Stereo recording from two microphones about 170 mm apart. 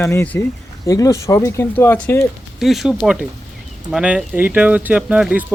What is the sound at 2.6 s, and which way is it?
Speech, centre (ahead or behind).